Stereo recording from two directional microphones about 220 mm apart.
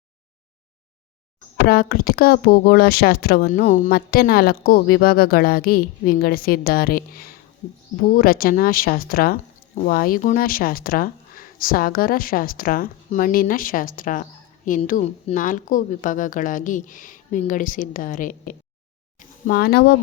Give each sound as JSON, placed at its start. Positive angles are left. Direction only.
{"t": 1.6, "sound": "speech", "side_deg": 45}